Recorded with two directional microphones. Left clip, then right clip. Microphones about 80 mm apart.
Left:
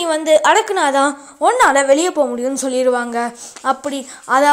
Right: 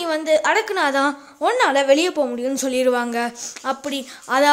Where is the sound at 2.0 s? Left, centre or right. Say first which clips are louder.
Left 4 dB; centre.